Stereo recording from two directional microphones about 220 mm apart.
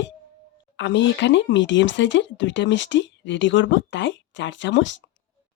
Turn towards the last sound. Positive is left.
turn(degrees=55)  # may be behind; listen again after turning